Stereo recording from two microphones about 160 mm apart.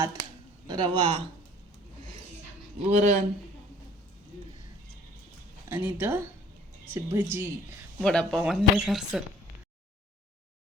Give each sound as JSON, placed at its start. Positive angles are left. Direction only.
{"t": 0.7, "sound": "speech", "side_deg": -30}
{"t": 2.8, "sound": "speech", "side_deg": -50}
{"t": 5.6, "sound": "a woman's voice", "side_deg": -15}
{"t": 8.0, "sound": "speech", "side_deg": 5}